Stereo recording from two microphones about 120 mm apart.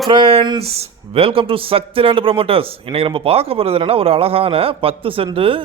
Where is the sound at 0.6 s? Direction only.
55° right (ahead or behind).